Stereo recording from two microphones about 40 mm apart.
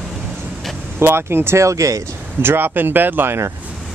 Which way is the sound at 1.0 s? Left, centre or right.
Right.